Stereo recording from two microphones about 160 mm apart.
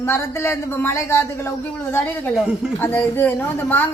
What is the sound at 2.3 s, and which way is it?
Speech, 5° right (ahead or behind).